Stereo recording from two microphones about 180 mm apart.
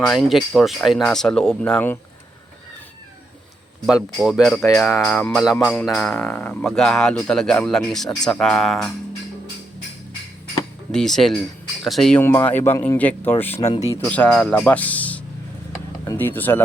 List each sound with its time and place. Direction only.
0.0 s speech: centre (ahead or behind)
3.8 s speech: 5° right (ahead or behind)
10.9 s speech: centre (ahead or behind)
12.2 s speech: 15° left (ahead or behind)
13.7 s speech: 40° left (ahead or behind)
14.0 s speech: 5° left (ahead or behind)